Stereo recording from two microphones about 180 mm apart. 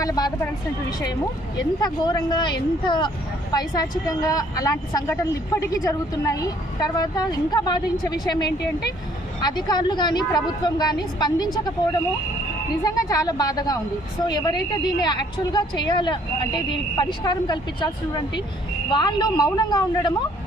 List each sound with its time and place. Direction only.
0.0 s a woman's voice: 20° left (ahead or behind)
12.8 s a woman's voice: 20° left (ahead or behind)